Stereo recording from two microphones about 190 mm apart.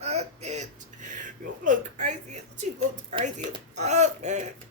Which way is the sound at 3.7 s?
35° right (ahead or behind).